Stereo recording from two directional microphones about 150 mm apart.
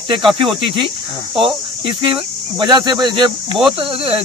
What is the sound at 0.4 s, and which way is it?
Speech, 35° right (ahead or behind).